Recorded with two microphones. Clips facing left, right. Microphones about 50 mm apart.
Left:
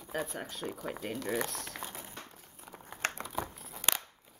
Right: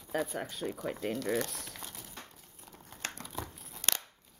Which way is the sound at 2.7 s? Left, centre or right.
Left.